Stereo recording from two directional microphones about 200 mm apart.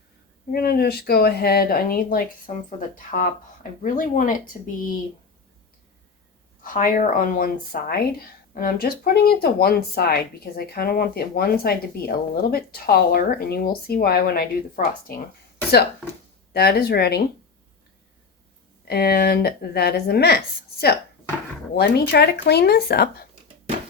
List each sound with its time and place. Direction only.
0.5 s speech: 50° left (ahead or behind)
6.6 s speech: 40° left (ahead or behind)
16.5 s speech: 55° left (ahead or behind)
18.9 s speech: 50° left (ahead or behind)
21.8 s speech: 55° left (ahead or behind)